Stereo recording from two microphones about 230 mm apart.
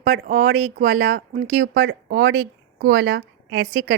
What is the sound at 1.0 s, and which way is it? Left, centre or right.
A woman's voice, right.